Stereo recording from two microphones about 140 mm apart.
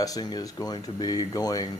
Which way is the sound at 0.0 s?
25° left (ahead or behind).